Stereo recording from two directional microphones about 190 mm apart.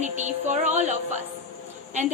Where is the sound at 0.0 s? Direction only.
40° right (ahead or behind).